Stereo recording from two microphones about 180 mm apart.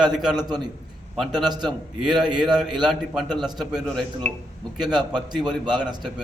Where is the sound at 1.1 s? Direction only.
5° right (ahead or behind).